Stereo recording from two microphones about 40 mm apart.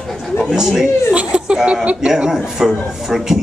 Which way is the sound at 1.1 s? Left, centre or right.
Right.